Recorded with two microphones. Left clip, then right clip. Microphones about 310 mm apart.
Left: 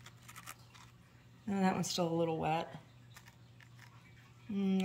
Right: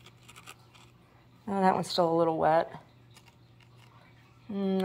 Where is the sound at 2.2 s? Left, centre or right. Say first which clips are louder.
Right 10 dB; right.